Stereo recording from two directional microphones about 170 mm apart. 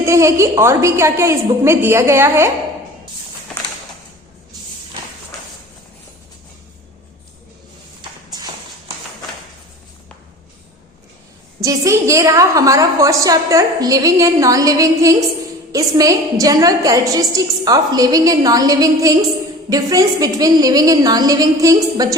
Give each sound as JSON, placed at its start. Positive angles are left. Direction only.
{"t": 0.0, "sound": "a woman's voice", "side_deg": -15}
{"t": 11.6, "sound": "a woman's voice", "side_deg": -20}